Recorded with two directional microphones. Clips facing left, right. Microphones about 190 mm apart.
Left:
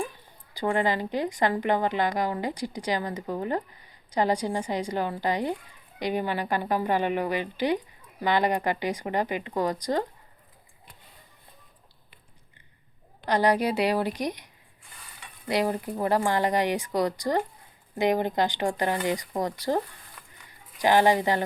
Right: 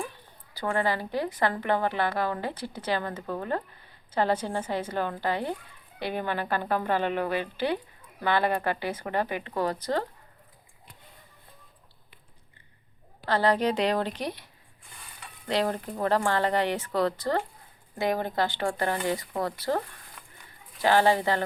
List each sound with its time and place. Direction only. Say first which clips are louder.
0.5 s a woman's voice: left 2 dB; 15° left (ahead or behind)
13.2 s a woman's voice: left 1 dB; 15° left (ahead or behind)
20.8 s a woman's voice: left 1 dB; 15° left (ahead or behind)